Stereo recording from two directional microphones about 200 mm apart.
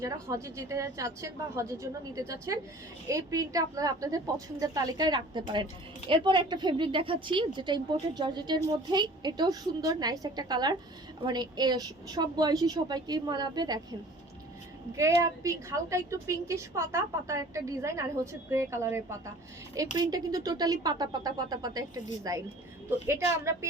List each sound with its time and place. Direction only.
0.0 s a woman's voice: 15° right (ahead or behind)
14.9 s a woman's voice: 15° right (ahead or behind)